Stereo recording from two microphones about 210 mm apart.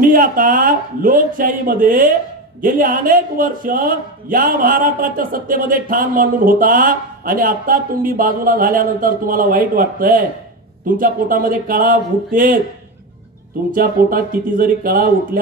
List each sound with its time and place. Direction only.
0.0 s a man's voice: 40° right (ahead or behind)
13.7 s speech: 40° right (ahead or behind)